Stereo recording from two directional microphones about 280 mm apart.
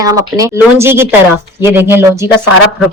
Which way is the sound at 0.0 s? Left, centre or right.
Centre.